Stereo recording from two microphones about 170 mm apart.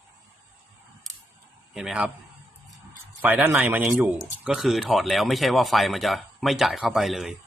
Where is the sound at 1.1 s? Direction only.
Centre (ahead or behind).